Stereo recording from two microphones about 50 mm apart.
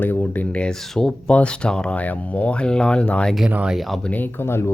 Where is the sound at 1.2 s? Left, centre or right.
Centre.